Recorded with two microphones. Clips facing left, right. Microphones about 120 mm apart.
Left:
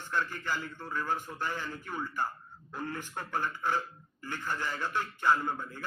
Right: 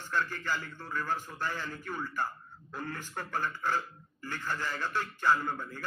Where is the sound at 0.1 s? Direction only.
15° left (ahead or behind).